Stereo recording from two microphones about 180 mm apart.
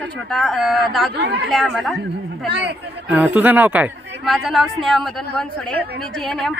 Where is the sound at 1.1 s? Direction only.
70° right (ahead or behind).